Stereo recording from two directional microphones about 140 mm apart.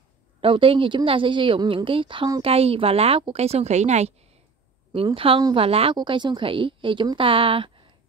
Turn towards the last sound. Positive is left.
turn(degrees=-40)  # may be behind; listen again after turning